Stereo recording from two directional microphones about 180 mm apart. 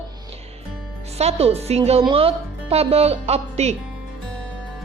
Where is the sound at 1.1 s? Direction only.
35° right (ahead or behind).